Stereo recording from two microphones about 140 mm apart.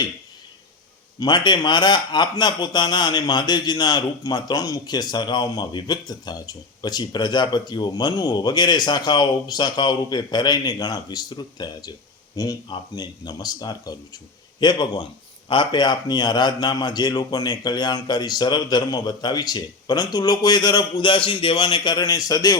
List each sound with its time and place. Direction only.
1.2 s a man's voice: 30° left (ahead or behind)